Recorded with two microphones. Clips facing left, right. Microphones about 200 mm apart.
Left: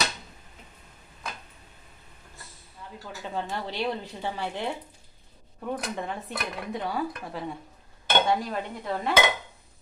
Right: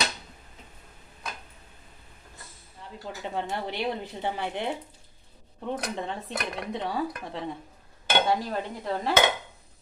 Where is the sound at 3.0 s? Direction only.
20° right (ahead or behind).